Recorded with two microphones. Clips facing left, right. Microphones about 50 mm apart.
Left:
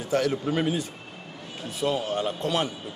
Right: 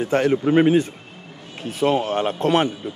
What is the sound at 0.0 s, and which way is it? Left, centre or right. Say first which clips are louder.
A man's voice: right 6 dB; right.